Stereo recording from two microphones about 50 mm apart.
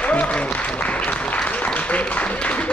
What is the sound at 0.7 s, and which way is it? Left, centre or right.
Applause, left.